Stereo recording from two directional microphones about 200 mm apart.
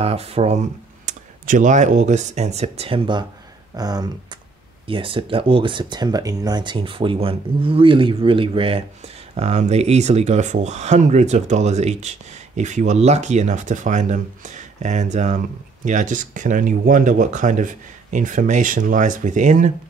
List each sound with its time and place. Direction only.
0.0 s speech: 30° right (ahead or behind)